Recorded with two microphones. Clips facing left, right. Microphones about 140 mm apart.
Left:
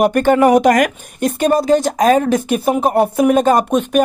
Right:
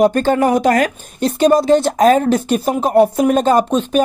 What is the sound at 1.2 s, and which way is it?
Speech, 50° left (ahead or behind).